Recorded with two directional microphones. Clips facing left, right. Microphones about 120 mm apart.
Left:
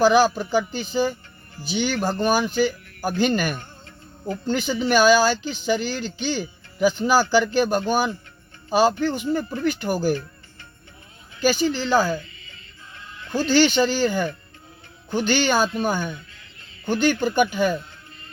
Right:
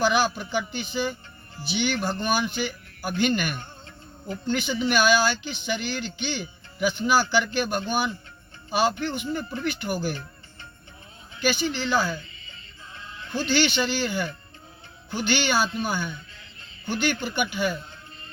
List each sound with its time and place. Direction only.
0.0 s speech: 40° left (ahead or behind)
11.3 s speech: 35° left (ahead or behind)
13.3 s speech: 35° left (ahead or behind)